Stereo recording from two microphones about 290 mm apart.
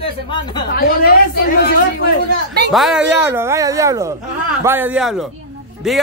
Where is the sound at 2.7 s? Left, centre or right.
Centre.